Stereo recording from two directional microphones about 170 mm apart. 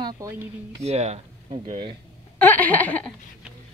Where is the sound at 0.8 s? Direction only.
40° right (ahead or behind).